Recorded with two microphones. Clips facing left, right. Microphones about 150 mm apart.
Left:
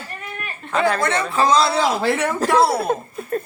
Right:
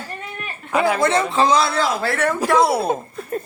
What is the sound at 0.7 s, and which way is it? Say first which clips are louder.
Speech: right 2 dB; 10° right (ahead or behind).